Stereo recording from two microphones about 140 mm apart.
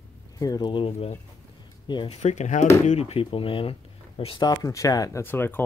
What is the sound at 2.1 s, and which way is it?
Speech, 55° left (ahead or behind).